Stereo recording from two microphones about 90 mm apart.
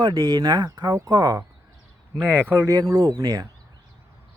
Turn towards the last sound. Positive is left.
turn(degrees=-45)  # may be behind; listen again after turning